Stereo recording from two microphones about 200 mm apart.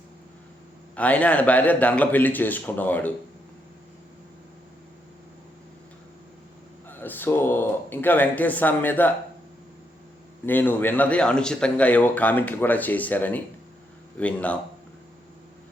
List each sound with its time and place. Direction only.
0.9 s speech: 5° left (ahead or behind)
6.8 s speech: 10° left (ahead or behind)
10.4 s speech: 10° left (ahead or behind)